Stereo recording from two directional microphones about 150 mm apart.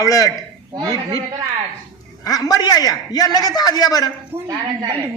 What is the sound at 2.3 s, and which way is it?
A man's voice, 25° left (ahead or behind).